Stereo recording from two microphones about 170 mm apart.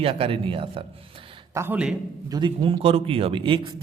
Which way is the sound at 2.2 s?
25° right (ahead or behind).